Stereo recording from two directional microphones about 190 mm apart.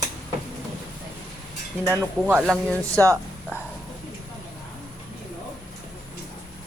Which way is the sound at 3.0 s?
10° left (ahead or behind).